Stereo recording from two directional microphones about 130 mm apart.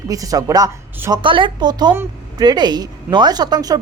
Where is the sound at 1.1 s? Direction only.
40° right (ahead or behind).